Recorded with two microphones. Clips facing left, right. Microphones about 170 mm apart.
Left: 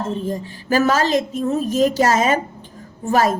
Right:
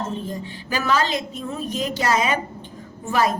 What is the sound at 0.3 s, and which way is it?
A woman's voice, 45° left (ahead or behind).